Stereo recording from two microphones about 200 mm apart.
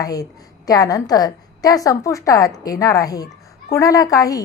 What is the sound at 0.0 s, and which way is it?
A woman's voice, 20° left (ahead or behind).